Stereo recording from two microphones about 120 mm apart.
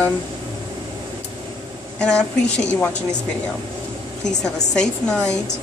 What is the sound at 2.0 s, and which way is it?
Speech, 10° left (ahead or behind).